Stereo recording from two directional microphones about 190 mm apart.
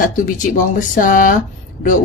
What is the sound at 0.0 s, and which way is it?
Speech, 45° left (ahead or behind).